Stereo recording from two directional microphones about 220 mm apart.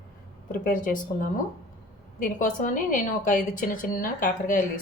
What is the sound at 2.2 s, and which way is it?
A woman's voice, 35° left (ahead or behind).